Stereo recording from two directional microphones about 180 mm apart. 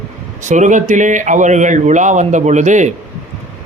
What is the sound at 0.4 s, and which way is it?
A man's voice, 45° right (ahead or behind).